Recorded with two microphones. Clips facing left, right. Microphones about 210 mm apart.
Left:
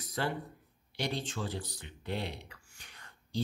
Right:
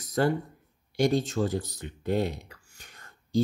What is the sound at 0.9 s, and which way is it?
Speech, 45° right (ahead or behind).